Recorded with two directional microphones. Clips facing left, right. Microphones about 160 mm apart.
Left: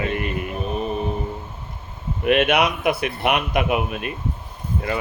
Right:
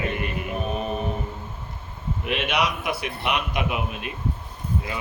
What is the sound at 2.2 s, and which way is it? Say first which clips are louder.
Speech: left 8 dB; 55° left (ahead or behind).